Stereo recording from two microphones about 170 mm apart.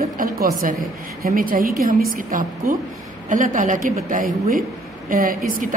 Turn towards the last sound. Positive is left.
turn(degrees=-55)  # may be behind; listen again after turning